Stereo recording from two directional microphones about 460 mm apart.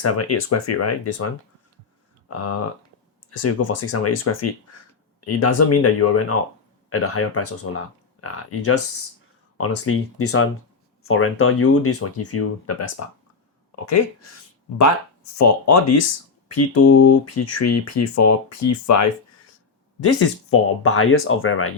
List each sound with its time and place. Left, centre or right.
0.0 s speech: left
2.3 s speech: left
15.4 s speech: left
20.1 s speech: left